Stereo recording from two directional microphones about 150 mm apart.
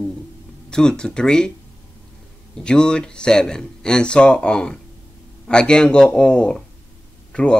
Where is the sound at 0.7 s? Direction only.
5° left (ahead or behind).